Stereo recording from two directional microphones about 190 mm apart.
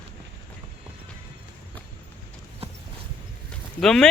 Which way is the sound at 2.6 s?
30° right (ahead or behind).